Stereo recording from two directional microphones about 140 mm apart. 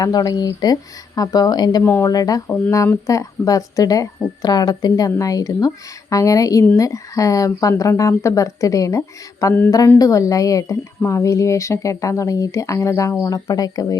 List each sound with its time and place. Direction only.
0.0 s speech: 25° left (ahead or behind)
1.8 s speech: 15° left (ahead or behind)
2.0 s speech: 25° left (ahead or behind)